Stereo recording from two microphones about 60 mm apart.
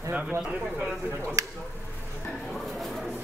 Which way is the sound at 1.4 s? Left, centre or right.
Right.